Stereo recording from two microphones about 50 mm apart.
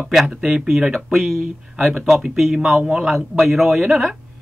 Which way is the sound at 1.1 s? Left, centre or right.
Centre.